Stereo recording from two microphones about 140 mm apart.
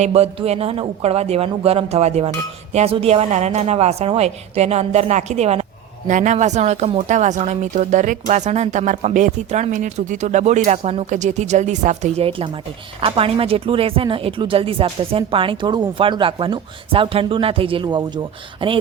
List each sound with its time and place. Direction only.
0.0 s a woman's voice: 45° right (ahead or behind)
6.1 s speech: 60° right (ahead or behind); by 18.8 s 35° right (ahead or behind)